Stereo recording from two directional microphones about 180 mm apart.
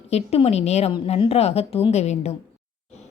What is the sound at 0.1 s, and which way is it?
A woman's voice, 35° left (ahead or behind).